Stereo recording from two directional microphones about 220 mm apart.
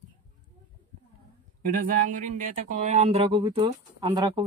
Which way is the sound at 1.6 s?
40° right (ahead or behind).